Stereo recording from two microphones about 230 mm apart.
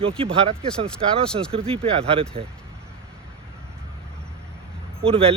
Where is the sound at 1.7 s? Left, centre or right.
Right.